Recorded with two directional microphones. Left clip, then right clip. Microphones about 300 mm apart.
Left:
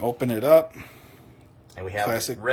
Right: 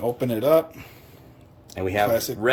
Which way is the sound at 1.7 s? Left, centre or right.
Right.